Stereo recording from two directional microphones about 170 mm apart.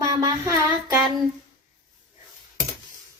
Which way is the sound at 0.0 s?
20° right (ahead or behind).